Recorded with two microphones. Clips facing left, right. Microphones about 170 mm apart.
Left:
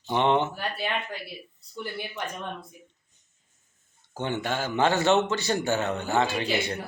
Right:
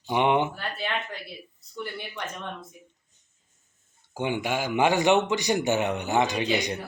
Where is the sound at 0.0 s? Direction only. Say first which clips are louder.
Even; 10° right (ahead or behind).